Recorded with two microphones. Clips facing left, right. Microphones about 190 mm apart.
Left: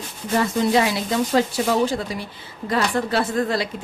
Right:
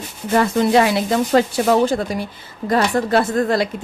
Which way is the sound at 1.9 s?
50° right (ahead or behind).